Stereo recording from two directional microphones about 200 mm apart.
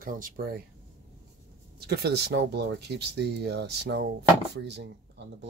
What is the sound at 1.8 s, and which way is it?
Speech, 55° right (ahead or behind).